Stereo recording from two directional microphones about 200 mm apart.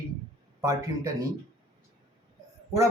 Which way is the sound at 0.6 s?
15° right (ahead or behind).